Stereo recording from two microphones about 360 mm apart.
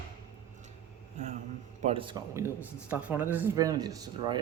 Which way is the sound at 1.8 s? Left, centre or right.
Centre.